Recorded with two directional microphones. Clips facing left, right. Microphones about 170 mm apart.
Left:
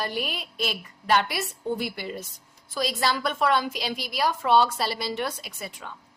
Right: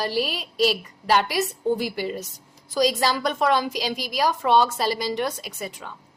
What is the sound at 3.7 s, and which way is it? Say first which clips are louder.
A woman's voice: right 4 dB; 40° right (ahead or behind).